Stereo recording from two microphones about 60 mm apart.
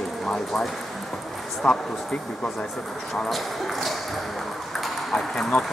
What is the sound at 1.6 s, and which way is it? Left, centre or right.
Speech, centre.